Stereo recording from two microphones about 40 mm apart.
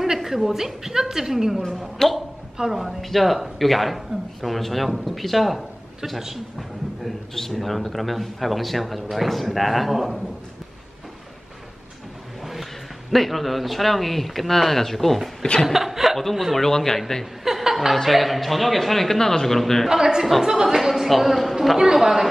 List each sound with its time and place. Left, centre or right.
0.0 s a woman's voice: centre
2.0 s speech: centre
2.5 s a woman's voice: centre
7.5 s speech: centre
13.1 s speech: centre
15.6 s a woman's voice: centre
16.2 s speech: centre
17.5 s speech: centre
19.9 s a woman's voice: centre
21.7 s a woman's voice: centre